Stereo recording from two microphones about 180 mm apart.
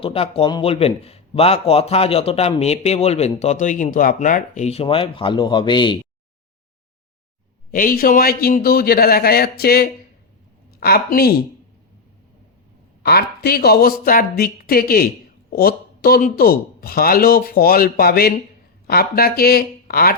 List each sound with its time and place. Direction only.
0.0 s a man's voice: 35° left (ahead or behind)
7.7 s speech: 50° left (ahead or behind)
13.0 s speech: 60° left (ahead or behind)